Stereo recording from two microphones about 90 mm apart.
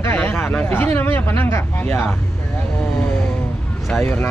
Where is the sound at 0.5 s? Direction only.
20° left (ahead or behind).